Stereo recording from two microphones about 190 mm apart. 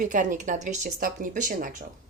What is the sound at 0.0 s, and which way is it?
Speech, 40° right (ahead or behind).